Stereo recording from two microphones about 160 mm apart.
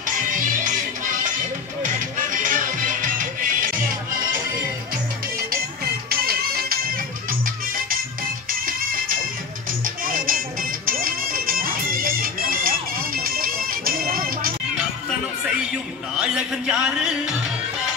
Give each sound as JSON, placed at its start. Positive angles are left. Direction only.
{"t": 0.0, "sound": "music", "side_deg": -55}
{"t": 6.0, "sound": "music", "side_deg": -70}
{"t": 16.2, "sound": "music", "side_deg": -5}